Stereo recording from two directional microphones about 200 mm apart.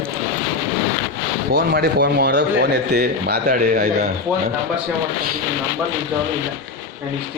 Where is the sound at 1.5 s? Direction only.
50° right (ahead or behind).